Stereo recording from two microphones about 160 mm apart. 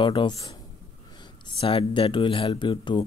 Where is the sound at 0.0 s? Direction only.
30° left (ahead or behind).